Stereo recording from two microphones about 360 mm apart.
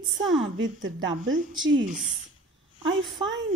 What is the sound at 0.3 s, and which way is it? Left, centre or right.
A woman's voice, right.